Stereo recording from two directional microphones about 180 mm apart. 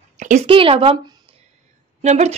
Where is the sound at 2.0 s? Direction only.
40° right (ahead or behind).